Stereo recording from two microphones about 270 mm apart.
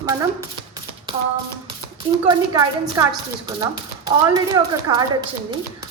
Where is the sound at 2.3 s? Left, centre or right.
Centre.